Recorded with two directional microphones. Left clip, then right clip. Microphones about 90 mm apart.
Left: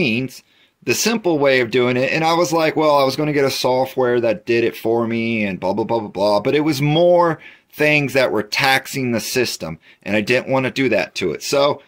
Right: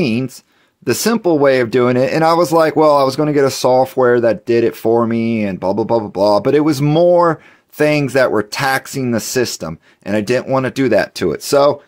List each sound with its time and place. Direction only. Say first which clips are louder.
0.0 s speech: right 1 dB; 55° right (ahead or behind); by 10.7 s 35° right (ahead or behind)
10.7 s speech: right 4 dB; 55° right (ahead or behind)